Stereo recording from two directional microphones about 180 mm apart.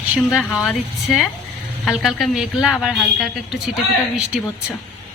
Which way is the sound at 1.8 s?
Centre (ahead or behind).